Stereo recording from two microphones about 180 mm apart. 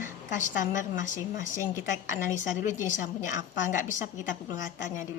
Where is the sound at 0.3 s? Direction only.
45° left (ahead or behind).